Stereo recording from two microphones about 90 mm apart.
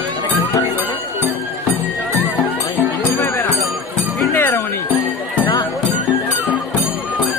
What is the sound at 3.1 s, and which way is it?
Music, 30° left (ahead or behind).